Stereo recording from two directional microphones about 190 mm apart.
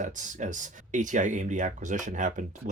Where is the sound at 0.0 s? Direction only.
40° right (ahead or behind).